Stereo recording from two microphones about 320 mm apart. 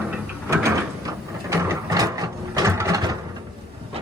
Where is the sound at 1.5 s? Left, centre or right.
Centre.